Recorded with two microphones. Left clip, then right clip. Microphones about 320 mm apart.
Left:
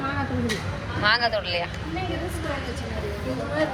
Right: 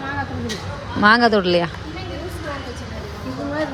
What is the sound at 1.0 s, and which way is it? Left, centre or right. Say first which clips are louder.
Speech: right 8 dB; right.